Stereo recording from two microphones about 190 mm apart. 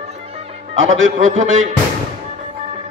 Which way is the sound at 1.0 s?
40° right (ahead or behind).